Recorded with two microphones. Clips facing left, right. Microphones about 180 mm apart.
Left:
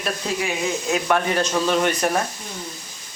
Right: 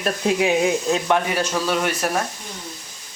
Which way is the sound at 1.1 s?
10° right (ahead or behind).